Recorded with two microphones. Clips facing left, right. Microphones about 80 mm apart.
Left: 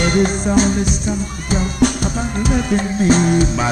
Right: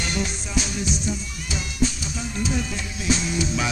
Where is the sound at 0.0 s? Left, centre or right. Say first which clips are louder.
Left 12 dB; left.